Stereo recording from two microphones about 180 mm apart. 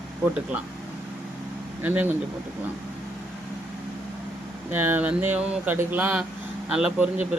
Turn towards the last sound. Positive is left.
turn(degrees=-5)  # may be behind; listen again after turning